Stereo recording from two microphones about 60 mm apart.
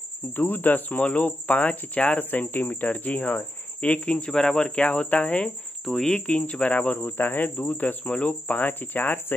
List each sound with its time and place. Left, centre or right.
0.4 s speech: left
5.9 s speech: centre
6.2 s speech: centre
7.1 s speech: left